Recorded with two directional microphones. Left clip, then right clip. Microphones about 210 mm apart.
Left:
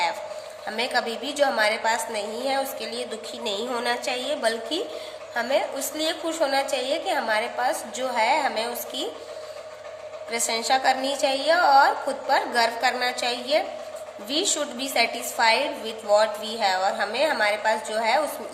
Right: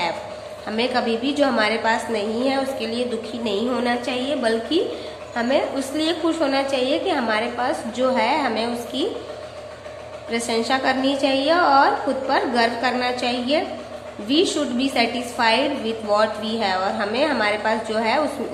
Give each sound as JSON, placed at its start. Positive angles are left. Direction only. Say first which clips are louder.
{"t": 0.8, "sound": "a woman's voice", "louder": "right 4 dB", "side_deg": 30}
{"t": 10.3, "sound": "a woman's voice", "louder": "right 2 dB", "side_deg": 30}